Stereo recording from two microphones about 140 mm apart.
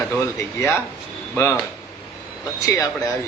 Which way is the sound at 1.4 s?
20° left (ahead or behind).